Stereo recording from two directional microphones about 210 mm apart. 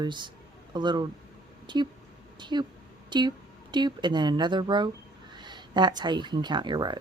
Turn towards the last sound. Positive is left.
turn(degrees=-20)  # may be behind; listen again after turning